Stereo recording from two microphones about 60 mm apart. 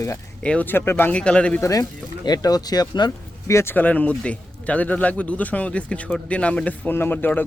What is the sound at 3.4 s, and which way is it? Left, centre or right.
Speech, left.